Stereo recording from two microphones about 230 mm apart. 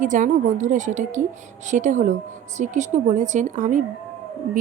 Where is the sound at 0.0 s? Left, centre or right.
Right.